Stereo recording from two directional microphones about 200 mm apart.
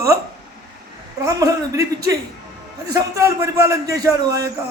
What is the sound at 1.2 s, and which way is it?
Speech, 15° right (ahead or behind).